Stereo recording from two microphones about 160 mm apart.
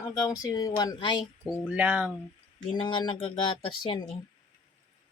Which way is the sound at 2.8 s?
30° left (ahead or behind).